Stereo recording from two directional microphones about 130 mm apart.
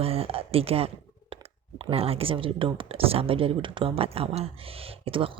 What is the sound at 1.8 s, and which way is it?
Speech, 50° right (ahead or behind).